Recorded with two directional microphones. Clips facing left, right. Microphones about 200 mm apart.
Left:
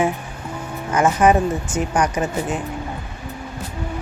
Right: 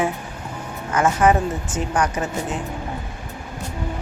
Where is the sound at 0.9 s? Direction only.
20° left (ahead or behind).